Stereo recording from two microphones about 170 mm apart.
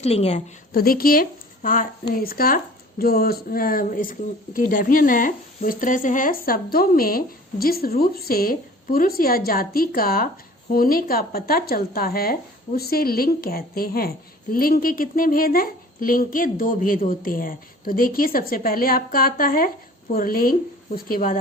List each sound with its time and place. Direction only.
0.0 s a woman's voice: 35° left (ahead or behind)
0.7 s speech: 60° left (ahead or behind)